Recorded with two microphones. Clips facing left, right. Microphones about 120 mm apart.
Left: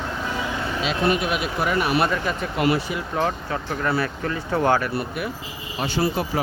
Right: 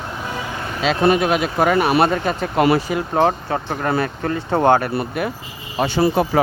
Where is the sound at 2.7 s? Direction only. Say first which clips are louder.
Right 6 dB; 90° right.